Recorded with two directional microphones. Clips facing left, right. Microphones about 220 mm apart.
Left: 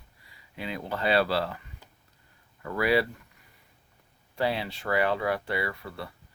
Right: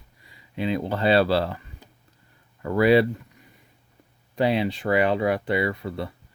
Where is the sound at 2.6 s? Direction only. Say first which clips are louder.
Right 7 dB; 30° right (ahead or behind).